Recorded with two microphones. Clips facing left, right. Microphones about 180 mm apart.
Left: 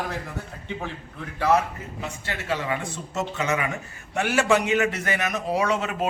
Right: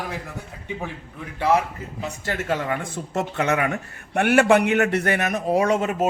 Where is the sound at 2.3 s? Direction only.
50° right (ahead or behind).